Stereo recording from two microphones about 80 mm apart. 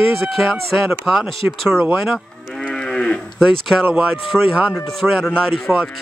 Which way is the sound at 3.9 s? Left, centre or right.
Centre.